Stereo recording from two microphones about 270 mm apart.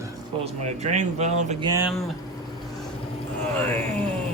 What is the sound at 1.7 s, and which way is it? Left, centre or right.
Speech, centre.